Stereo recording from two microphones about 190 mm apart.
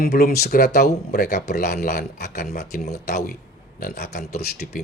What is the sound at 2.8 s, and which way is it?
Speech, 55° left (ahead or behind).